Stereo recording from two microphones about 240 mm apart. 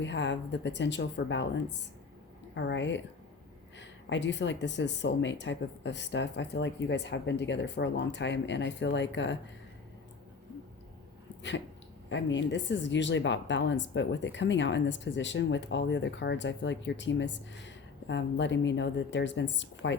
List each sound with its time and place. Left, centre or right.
0.0 s speech: left
12.0 s speech: left